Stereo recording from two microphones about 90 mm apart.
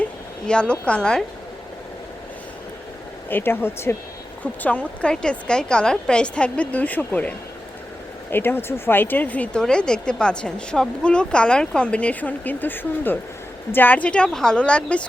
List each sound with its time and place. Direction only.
0.4 s speech: 10° left (ahead or behind)
3.2 s speech: 25° left (ahead or behind)
4.6 s speech: 15° left (ahead or behind)